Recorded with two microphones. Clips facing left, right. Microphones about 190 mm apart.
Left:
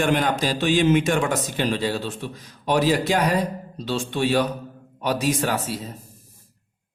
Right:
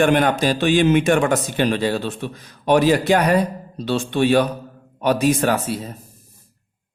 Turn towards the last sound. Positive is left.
turn(degrees=-60)  # may be behind; listen again after turning